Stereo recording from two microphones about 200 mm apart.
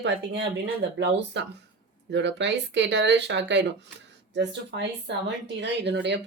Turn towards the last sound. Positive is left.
turn(degrees=-60)  # may be behind; listen again after turning